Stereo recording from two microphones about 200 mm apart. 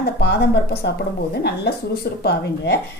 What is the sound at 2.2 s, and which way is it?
Speech, 50° left (ahead or behind).